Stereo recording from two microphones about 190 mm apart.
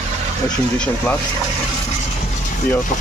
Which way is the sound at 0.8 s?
10° left (ahead or behind).